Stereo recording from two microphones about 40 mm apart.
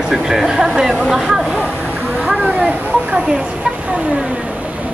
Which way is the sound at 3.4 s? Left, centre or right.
Right.